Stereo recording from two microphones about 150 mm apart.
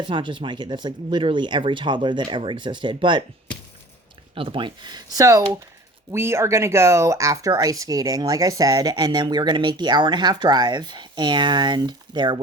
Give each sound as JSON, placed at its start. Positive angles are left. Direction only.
{"t": 0.0, "sound": "speech", "side_deg": -35}
{"t": 4.4, "sound": "speech", "side_deg": -35}